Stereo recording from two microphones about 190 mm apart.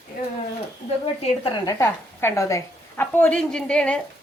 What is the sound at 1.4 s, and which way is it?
A woman's voice, 20° left (ahead or behind).